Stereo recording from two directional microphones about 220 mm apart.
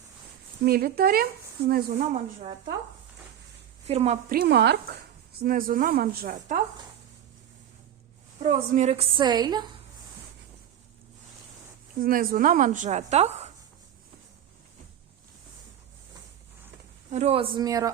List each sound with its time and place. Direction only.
0.6 s speech: 45° right (ahead or behind)
2.0 s a woman's voice: 30° right (ahead or behind)
3.8 s speech: 30° right (ahead or behind)
8.4 s a woman's voice: 35° right (ahead or behind)
11.9 s speech: 40° right (ahead or behind)
17.1 s a woman's voice: 30° right (ahead or behind)